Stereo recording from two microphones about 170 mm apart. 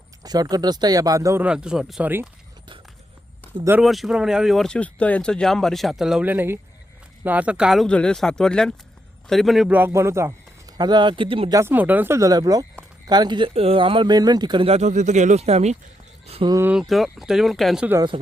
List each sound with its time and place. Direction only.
0.2 s speech: 20° right (ahead or behind)
3.8 s a man's voice: centre (ahead or behind); by 11.5 s 30° right (ahead or behind)
11.5 s a man's voice: 15° right (ahead or behind); by 15.8 s 40° right (ahead or behind)
16.2 s a sound: 35° right (ahead or behind)
16.5 s a man's voice: 15° right (ahead or behind)
16.7 s speech: centre (ahead or behind)
17.9 s speech: 25° right (ahead or behind)